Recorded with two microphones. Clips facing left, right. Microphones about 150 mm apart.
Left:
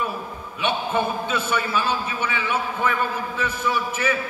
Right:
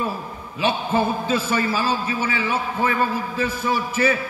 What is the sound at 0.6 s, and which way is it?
A man's voice, 30° right (ahead or behind).